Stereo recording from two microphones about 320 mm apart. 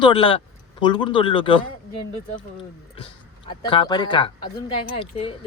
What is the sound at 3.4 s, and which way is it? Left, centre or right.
Speech, centre.